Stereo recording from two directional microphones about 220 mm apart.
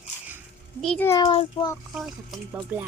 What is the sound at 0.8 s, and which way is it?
Speech, 5° left (ahead or behind).